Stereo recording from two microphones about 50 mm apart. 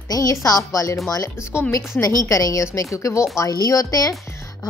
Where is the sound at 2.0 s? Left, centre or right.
Left.